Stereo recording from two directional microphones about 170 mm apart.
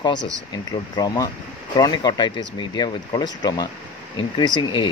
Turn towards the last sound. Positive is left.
turn(degrees=25)  # may be behind; listen again after turning